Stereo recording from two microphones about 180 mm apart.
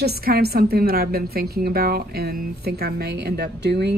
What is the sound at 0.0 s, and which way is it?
A woman's voice, 60° right (ahead or behind).